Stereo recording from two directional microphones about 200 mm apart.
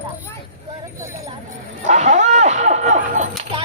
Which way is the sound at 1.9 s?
35° right (ahead or behind).